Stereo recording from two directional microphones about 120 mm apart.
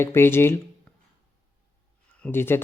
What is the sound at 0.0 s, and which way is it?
Speech, 20° left (ahead or behind).